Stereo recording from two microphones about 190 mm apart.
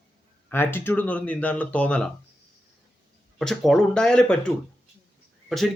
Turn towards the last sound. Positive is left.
turn(degrees=0)  # may be behind; listen again after turning